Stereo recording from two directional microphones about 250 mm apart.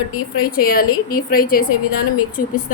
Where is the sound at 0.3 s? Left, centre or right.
Left.